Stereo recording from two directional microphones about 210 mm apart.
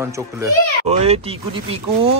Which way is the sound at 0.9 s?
30° right (ahead or behind).